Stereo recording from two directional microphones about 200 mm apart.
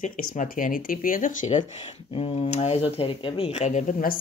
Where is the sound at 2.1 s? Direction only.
30° left (ahead or behind).